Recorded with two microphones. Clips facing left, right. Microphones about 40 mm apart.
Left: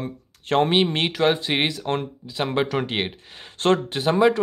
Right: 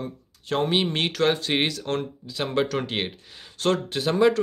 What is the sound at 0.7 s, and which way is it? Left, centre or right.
Speech, left.